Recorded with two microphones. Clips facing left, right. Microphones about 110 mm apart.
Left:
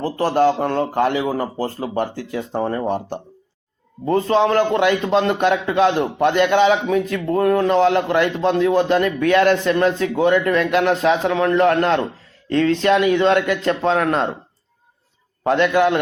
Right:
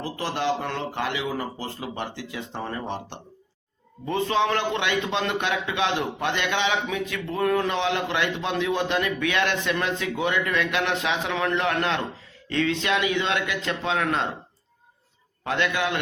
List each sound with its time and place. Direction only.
0.0 s a man's voice: 45° left (ahead or behind)
15.4 s a man's voice: 50° left (ahead or behind)